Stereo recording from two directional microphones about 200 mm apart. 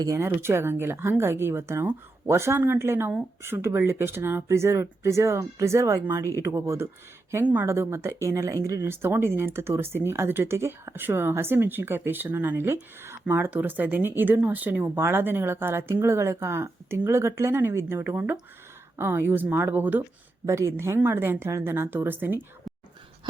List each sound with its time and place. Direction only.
0.0 s speech: 15° right (ahead or behind)